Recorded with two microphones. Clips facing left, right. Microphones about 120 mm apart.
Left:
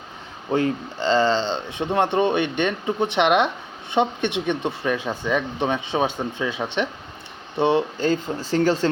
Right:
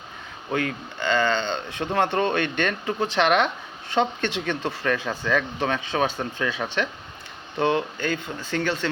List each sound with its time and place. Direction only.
0.5 s speech: 30° left (ahead or behind)